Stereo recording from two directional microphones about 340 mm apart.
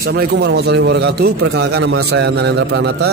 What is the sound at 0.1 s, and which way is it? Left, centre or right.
A man's voice, right.